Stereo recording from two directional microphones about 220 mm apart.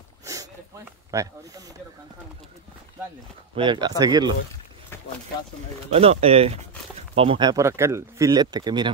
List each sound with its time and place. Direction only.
0.2 s sniff: 15° right (ahead or behind)
1.1 s speech: 15° right (ahead or behind)
3.5 s speech: 20° right (ahead or behind)
5.9 s speech: 25° right (ahead or behind)